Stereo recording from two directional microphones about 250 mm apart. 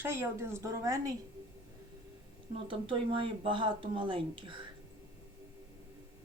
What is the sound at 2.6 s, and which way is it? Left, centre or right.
Speech, centre.